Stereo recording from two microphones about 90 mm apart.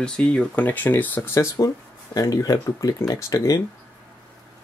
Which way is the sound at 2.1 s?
40° left (ahead or behind).